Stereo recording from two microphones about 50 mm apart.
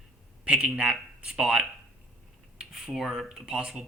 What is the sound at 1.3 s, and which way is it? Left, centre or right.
Speech, centre.